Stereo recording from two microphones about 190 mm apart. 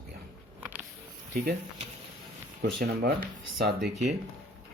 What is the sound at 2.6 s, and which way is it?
Speech, 55° right (ahead or behind).